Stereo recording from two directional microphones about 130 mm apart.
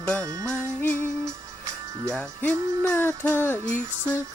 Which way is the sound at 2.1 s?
10° left (ahead or behind).